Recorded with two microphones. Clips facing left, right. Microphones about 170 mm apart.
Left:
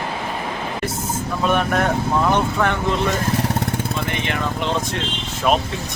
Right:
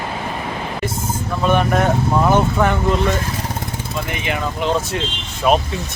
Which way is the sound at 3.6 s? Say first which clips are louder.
Left 4 dB; 75° left (ahead or behind).